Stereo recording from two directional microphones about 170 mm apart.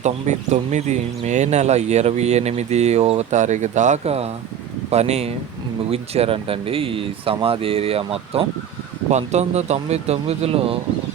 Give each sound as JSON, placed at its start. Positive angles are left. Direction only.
{"t": 0.0, "sound": "speech", "side_deg": -45}